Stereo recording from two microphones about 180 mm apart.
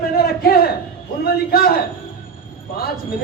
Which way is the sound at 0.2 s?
55° left (ahead or behind).